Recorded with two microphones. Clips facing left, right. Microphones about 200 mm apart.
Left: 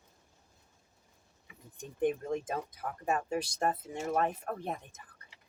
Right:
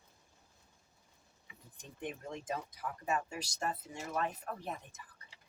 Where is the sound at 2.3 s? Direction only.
50° left (ahead or behind).